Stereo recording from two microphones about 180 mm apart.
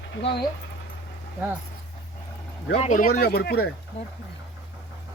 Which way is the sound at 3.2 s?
60° left (ahead or behind).